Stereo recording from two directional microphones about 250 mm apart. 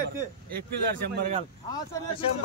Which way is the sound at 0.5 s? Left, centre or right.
Right.